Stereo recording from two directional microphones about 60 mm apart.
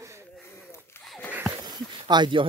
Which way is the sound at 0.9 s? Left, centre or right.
Left.